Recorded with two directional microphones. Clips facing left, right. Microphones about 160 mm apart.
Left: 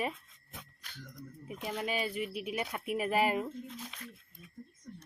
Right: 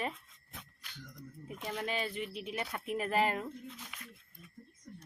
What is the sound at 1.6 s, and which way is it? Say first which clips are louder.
Speech: left 2 dB; 10° left (ahead or behind).